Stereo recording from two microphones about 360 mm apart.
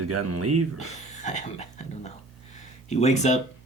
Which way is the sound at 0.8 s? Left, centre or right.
Centre.